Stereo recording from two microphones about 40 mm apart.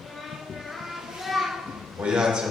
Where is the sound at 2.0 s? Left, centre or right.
Centre.